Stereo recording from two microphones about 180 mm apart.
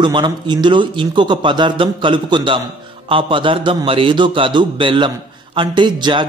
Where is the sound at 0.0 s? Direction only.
25° right (ahead or behind).